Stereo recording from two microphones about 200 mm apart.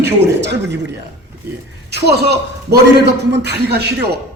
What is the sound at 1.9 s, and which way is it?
A man's voice, 55° right (ahead or behind).